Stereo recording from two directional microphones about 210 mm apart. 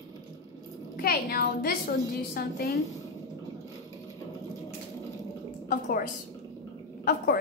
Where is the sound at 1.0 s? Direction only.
45° left (ahead or behind).